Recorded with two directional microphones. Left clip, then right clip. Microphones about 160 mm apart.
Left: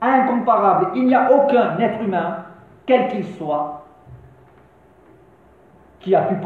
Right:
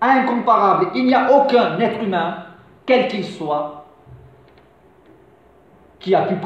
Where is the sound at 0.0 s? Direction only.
35° right (ahead or behind).